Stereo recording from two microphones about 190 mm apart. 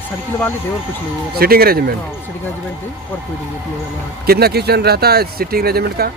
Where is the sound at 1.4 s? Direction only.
55° right (ahead or behind).